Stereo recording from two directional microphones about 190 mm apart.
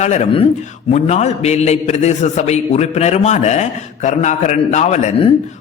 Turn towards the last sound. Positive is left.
turn(degrees=35)  # may be behind; listen again after turning